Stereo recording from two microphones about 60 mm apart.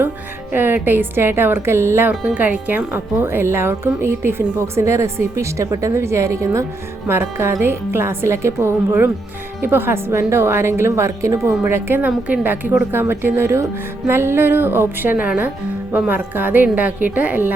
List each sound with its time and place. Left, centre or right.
0.5 s a woman's voice: right
2.0 s speech: right
7.1 s speech: right
11.6 s a woman's voice: right
12.0 s a woman's voice: right